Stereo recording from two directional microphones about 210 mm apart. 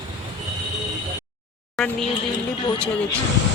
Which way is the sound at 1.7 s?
Centre (ahead or behind).